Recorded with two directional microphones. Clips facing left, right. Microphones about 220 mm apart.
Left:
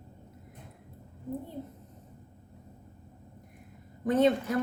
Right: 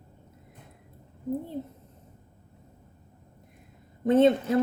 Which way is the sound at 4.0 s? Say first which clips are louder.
Right 4 dB; 25° right (ahead or behind).